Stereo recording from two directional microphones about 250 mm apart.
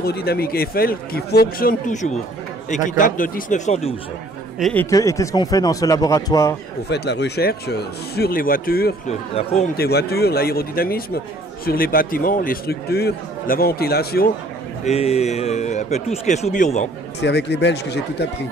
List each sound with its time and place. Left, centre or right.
0.0 s speech: left
4.6 s speech: centre
4.8 s speech: centre
6.9 s speech: left
9.3 s a man's voice: left
9.8 s speech: left
14.9 s a man's voice: left
17.2 s speech: left